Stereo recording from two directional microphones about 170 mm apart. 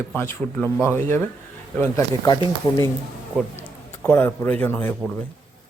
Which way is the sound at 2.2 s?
20° left (ahead or behind).